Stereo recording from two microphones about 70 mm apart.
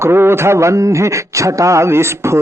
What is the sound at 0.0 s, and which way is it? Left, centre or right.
A man's voice, right.